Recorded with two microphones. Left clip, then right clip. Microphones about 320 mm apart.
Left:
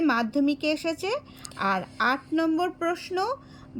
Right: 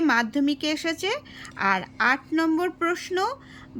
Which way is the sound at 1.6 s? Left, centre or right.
Right.